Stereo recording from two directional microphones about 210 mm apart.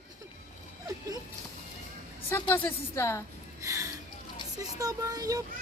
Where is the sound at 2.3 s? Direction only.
15° left (ahead or behind).